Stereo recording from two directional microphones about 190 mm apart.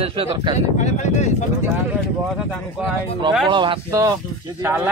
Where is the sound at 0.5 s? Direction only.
40° left (ahead or behind).